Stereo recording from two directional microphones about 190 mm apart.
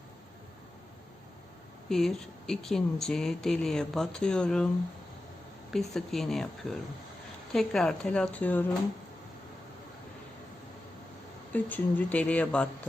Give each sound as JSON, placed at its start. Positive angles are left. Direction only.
{"t": 1.9, "sound": "speech", "side_deg": 0}
{"t": 5.7, "sound": "speech", "side_deg": 0}
{"t": 11.5, "sound": "speech", "side_deg": 10}